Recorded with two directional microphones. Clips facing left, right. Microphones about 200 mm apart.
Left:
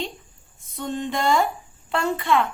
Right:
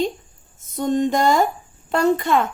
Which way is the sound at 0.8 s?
40° right (ahead or behind).